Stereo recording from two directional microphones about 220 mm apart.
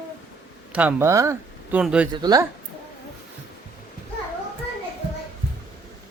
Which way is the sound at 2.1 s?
20° right (ahead or behind).